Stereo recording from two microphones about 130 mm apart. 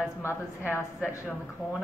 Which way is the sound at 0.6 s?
15° right (ahead or behind).